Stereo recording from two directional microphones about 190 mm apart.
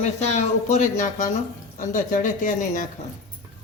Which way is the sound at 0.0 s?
35° left (ahead or behind).